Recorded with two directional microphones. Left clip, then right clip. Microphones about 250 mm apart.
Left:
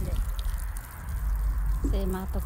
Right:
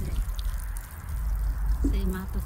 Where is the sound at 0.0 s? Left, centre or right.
Centre.